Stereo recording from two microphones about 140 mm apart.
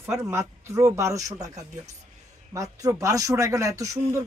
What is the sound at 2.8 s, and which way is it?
Speech, 25° right (ahead or behind).